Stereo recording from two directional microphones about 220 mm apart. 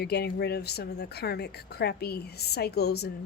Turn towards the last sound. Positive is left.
turn(degrees=50)  # may be behind; listen again after turning